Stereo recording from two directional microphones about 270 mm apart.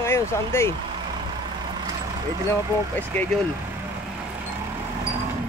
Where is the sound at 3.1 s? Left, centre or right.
Centre.